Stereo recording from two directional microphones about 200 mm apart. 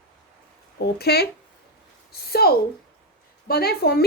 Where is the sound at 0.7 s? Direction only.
50° left (ahead or behind).